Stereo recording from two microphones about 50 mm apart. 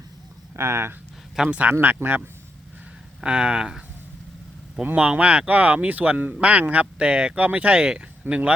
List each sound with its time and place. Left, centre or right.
0.5 s speech: right
1.5 s speech: right
1.8 s speech: right
3.2 s speech: centre
4.9 s speech: right